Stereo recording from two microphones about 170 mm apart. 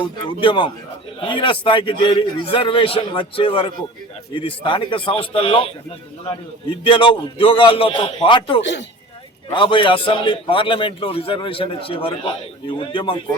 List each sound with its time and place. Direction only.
0.0 s a man's voice: 30° left (ahead or behind)
6.8 s a man's voice: 30° left (ahead or behind)